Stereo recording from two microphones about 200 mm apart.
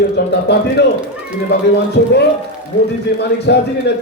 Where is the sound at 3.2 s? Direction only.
55° left (ahead or behind).